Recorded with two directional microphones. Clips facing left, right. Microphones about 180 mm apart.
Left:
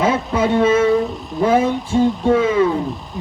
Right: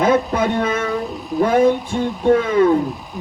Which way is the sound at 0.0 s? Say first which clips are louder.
Right 1 dB; 55° right (ahead or behind).